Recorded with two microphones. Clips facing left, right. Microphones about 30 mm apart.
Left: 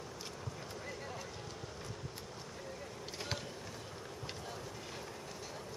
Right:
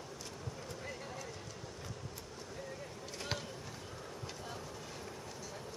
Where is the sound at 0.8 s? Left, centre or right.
Centre.